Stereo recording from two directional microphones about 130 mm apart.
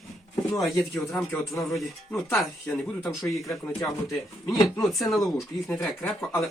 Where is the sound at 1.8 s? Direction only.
Centre (ahead or behind).